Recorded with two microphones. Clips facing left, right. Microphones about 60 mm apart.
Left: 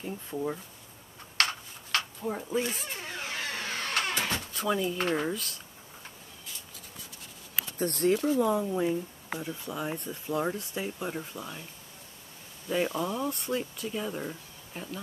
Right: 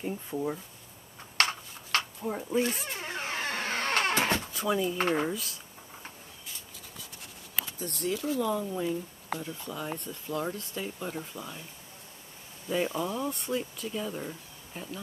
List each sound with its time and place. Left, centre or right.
0.3 s speech: centre
1.4 s a sound: right
2.2 s speech: centre
3.0 s vehicle: right
4.5 s speech: centre
7.8 s speech: left
8.5 s speech: centre
12.6 s speech: centre